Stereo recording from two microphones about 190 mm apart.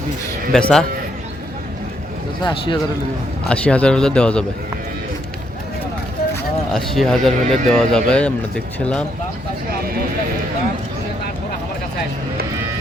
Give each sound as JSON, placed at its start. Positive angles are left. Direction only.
{"t": 0.5, "sound": "speech", "side_deg": 5}
{"t": 2.4, "sound": "speech", "side_deg": 25}
{"t": 3.5, "sound": "speech", "side_deg": 5}
{"t": 6.7, "sound": "speech", "side_deg": 0}